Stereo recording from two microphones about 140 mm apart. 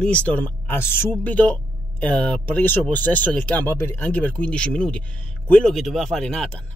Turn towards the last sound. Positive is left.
turn(degrees=5)  # may be behind; listen again after turning